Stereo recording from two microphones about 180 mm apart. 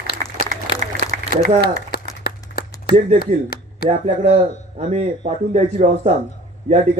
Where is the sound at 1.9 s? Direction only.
60° left (ahead or behind).